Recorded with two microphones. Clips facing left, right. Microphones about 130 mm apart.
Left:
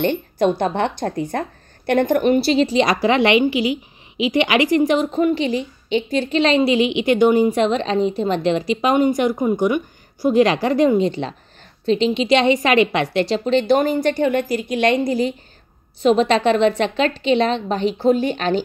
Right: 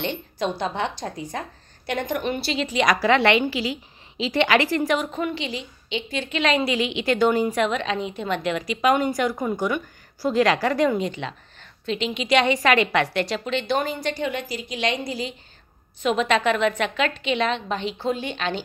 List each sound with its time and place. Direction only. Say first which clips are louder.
0.0 s a woman's voice: left 9 dB; 50° left (ahead or behind)
16.0 s a woman's voice: left 6 dB; 35° left (ahead or behind)